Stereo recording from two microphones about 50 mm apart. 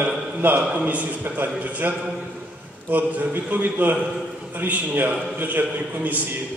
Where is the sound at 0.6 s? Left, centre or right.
Right.